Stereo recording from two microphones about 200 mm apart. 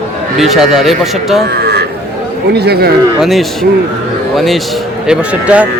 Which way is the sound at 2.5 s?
55° right (ahead or behind).